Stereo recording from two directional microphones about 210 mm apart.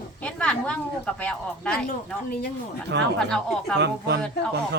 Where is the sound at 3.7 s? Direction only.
55° right (ahead or behind).